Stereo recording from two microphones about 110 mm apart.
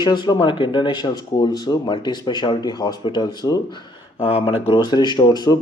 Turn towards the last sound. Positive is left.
turn(degrees=40)  # may be behind; listen again after turning